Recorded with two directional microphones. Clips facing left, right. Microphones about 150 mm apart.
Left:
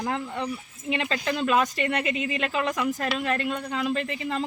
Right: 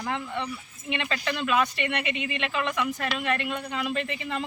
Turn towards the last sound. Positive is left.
turn(degrees=35)  # may be behind; listen again after turning